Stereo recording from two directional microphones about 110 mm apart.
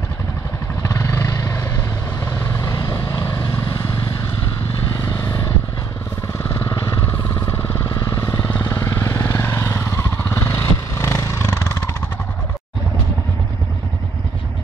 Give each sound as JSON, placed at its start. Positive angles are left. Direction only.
{"t": 0.8, "sound": "vehicle", "side_deg": 25}
{"t": 2.3, "sound": "vehicle", "side_deg": 20}
{"t": 5.0, "sound": "vehicle", "side_deg": 25}
{"t": 8.5, "sound": "vehicle", "side_deg": 20}